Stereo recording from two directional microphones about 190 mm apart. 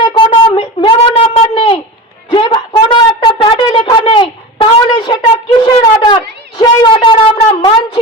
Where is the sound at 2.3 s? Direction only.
25° left (ahead or behind).